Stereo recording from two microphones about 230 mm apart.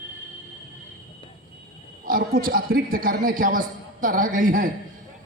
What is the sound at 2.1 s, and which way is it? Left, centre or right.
A man's voice, right.